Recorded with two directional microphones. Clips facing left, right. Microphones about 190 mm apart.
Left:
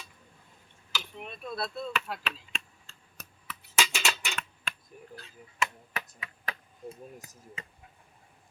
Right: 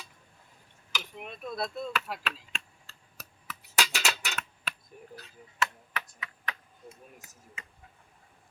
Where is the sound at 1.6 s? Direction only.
10° right (ahead or behind).